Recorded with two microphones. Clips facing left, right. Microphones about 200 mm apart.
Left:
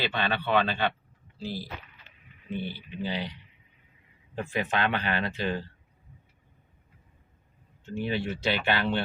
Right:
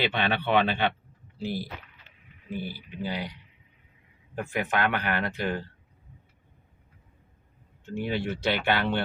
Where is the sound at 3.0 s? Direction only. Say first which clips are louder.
Even; 25° left (ahead or behind).